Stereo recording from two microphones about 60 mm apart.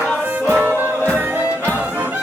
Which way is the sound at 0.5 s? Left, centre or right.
Right.